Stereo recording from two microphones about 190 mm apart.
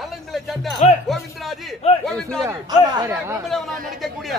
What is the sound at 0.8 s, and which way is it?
Music, 35° left (ahead or behind).